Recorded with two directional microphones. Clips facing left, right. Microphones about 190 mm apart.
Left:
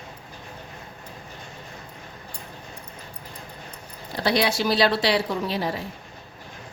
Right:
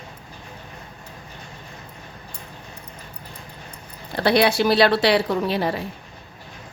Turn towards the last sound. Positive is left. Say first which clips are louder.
# right 4 dB
turn(degrees=-60)  # may be behind; listen again after turning